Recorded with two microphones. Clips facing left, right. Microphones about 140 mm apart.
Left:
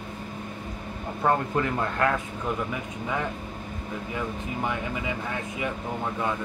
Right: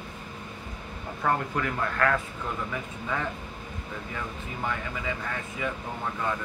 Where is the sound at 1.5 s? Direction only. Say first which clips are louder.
Left 3 dB; 20° left (ahead or behind).